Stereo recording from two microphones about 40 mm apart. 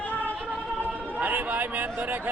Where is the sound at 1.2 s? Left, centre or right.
Right.